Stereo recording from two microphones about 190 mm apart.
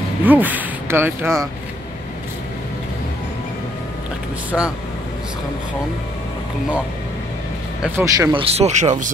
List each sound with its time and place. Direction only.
0.2 s speech: 10° right (ahead or behind)
4.5 s speech: 5° left (ahead or behind)
7.8 s speech: 15° right (ahead or behind)
8.3 s speech: 30° right (ahead or behind)